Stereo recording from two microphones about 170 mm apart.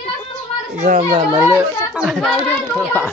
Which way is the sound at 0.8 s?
45° right (ahead or behind).